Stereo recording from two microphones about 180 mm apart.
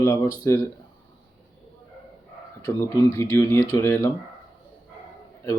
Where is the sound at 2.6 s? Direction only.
15° left (ahead or behind).